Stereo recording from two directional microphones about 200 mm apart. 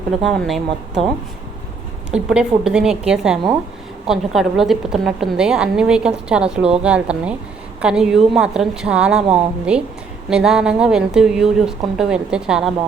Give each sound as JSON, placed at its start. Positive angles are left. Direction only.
{"t": 0.2, "sound": "a woman's voice", "side_deg": 0}
{"t": 2.0, "sound": "a woman's voice", "side_deg": -5}